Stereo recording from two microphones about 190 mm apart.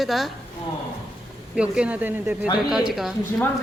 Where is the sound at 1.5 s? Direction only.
5° right (ahead or behind).